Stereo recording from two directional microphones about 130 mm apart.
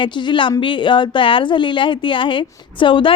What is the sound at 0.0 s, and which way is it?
A woman's voice, 40° left (ahead or behind).